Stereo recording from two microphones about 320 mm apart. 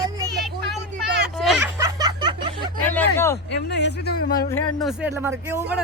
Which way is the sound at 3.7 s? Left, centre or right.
Left.